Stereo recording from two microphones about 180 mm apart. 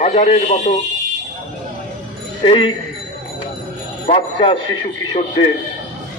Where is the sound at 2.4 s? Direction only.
30° left (ahead or behind).